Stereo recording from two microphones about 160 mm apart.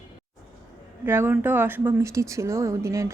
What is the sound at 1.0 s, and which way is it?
Speech, 15° right (ahead or behind).